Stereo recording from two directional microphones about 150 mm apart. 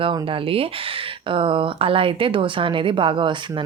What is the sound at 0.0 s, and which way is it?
A woman's voice, 35° right (ahead or behind).